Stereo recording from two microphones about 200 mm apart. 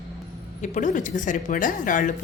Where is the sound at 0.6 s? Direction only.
40° left (ahead or behind).